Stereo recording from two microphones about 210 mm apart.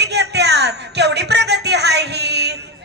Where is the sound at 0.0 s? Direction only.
55° right (ahead or behind).